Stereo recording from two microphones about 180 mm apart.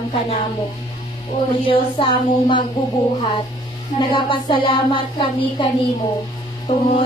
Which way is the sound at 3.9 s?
25° left (ahead or behind).